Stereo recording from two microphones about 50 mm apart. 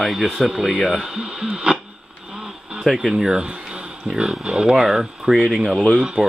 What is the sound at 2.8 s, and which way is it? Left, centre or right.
Speech, centre.